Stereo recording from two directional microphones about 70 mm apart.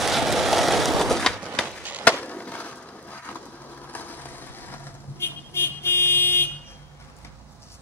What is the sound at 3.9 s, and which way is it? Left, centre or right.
Vehicle, left.